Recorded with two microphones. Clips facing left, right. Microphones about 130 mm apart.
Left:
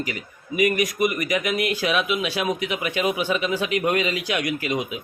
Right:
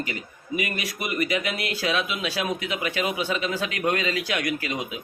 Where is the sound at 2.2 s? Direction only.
40° right (ahead or behind).